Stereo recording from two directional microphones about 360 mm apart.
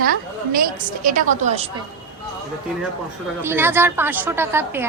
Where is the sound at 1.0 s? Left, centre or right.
Right.